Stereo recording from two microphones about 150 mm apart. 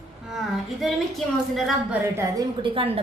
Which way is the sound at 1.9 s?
20° right (ahead or behind).